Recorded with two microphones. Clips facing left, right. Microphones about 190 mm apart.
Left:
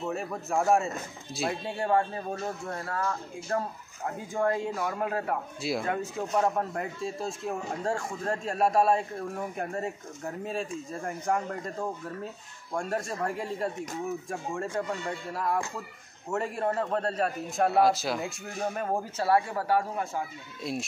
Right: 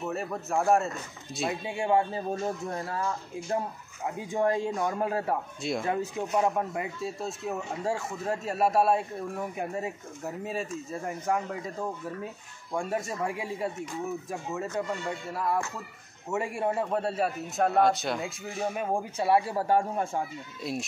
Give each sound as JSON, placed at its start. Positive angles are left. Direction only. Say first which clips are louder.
{"t": 0.1, "sound": "speech", "louder": "even", "side_deg": 0}
{"t": 5.6, "sound": "speech", "louder": "even", "side_deg": 0}
{"t": 5.9, "sound": "speech", "louder": "right 1 dB", "side_deg": -20}
{"t": 6.3, "sound": "speech", "louder": "even", "side_deg": -10}
{"t": 12.7, "sound": "speech", "louder": "even", "side_deg": -5}
{"t": 19.2, "sound": "speech", "louder": "right 1 dB", "side_deg": -25}
{"t": 20.6, "sound": "speech", "louder": "even", "side_deg": 0}